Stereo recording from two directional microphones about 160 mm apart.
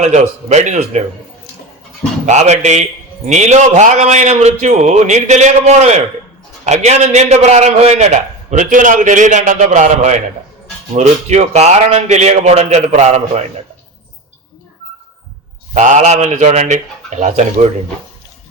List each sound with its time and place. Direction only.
0.0 s a man's voice: 45° right (ahead or behind)
2.2 s a man's voice: 45° right (ahead or behind)
15.7 s a man's voice: 50° right (ahead or behind)